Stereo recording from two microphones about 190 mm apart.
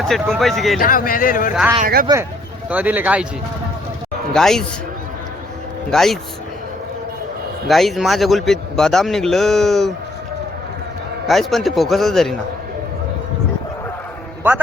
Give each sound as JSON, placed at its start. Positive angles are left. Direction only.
{"t": 0.0, "sound": "a man's voice", "side_deg": 0}
{"t": 0.8, "sound": "a man's voice", "side_deg": 50}
{"t": 1.8, "sound": "speech", "side_deg": -50}
{"t": 2.6, "sound": "speech", "side_deg": -10}
{"t": 4.4, "sound": "a man's voice", "side_deg": 0}
{"t": 5.9, "sound": "a man's voice", "side_deg": 0}
{"t": 7.7, "sound": "a man's voice", "side_deg": 0}
{"t": 11.3, "sound": "a man's voice", "side_deg": 0}